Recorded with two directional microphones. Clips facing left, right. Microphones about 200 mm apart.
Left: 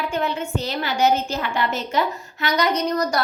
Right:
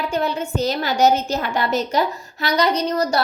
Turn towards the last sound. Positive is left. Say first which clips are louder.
# right 2 dB
turn(degrees=-30)  # may be behind; listen again after turning